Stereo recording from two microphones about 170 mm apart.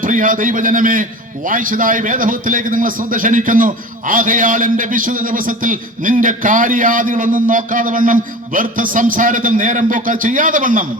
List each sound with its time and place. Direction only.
0.0 s a man's voice: 50° right (ahead or behind)